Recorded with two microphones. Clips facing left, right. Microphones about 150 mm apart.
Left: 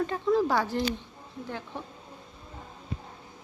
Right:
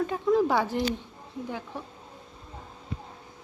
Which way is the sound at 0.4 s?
15° right (ahead or behind).